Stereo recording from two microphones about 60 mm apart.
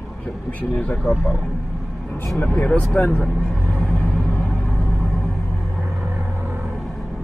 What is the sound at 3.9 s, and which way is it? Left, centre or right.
Vehicle, centre.